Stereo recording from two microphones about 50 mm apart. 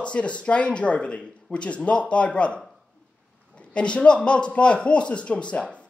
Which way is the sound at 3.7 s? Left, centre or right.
Left.